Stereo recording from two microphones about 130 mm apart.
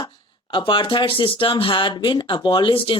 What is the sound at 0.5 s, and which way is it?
Speech, 40° left (ahead or behind).